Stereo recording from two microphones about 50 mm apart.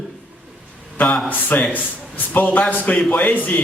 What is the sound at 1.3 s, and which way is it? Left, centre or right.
A man's voice, left.